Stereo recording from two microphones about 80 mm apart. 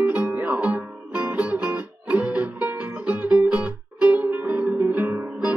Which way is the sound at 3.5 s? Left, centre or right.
Centre.